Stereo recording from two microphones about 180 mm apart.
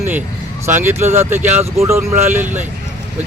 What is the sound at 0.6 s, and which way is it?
Speech, 15° right (ahead or behind).